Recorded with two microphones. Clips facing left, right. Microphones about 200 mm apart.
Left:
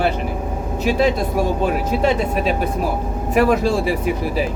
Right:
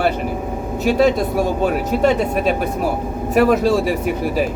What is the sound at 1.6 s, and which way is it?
Speech, 45° right (ahead or behind).